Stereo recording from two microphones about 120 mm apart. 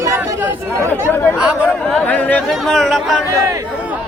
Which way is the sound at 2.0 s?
15° left (ahead or behind).